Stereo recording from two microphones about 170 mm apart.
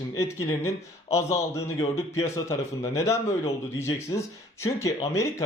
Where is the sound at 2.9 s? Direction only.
15° left (ahead or behind).